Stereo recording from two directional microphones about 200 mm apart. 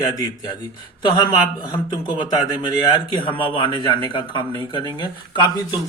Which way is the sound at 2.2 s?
20° left (ahead or behind).